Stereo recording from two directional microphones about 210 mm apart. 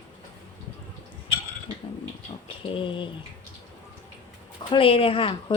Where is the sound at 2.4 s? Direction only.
25° left (ahead or behind).